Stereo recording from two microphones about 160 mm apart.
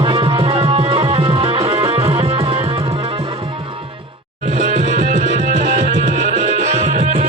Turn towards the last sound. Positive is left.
turn(degrees=-45)  # may be behind; listen again after turning